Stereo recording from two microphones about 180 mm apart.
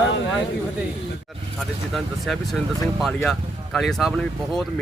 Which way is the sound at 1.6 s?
Centre (ahead or behind).